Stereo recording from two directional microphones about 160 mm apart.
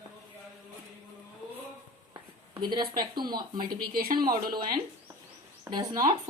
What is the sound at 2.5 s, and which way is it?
Speech, 25° right (ahead or behind).